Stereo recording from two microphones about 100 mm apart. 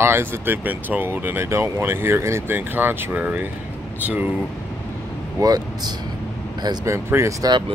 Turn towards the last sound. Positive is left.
turn(degrees=-30)  # may be behind; listen again after turning